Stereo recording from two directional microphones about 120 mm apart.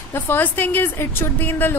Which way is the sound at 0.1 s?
15° left (ahead or behind).